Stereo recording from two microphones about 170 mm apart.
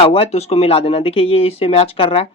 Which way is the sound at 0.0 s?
35° left (ahead or behind).